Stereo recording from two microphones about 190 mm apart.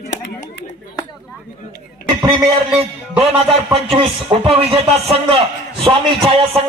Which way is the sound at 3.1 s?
30° right (ahead or behind).